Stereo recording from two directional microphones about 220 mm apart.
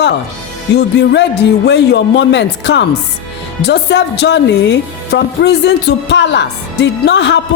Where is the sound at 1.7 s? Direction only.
50° left (ahead or behind).